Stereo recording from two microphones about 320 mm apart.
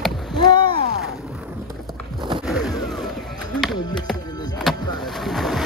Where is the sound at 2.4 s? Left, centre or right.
Centre.